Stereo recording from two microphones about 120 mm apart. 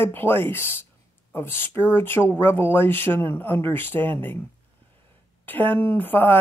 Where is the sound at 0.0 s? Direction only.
20° left (ahead or behind).